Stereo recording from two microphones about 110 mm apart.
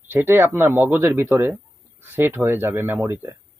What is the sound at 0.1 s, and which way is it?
Speech, 20° right (ahead or behind).